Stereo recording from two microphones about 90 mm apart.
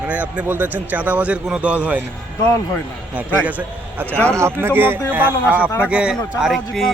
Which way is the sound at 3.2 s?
15° right (ahead or behind).